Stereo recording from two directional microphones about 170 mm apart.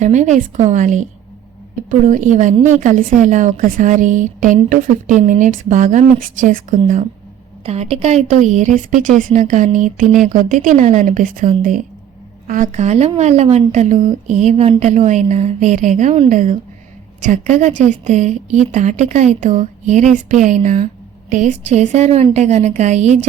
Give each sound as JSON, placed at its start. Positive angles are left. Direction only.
{"t": 0.0, "sound": "a woman's voice", "side_deg": -45}
{"t": 7.6, "sound": "a woman's voice", "side_deg": -40}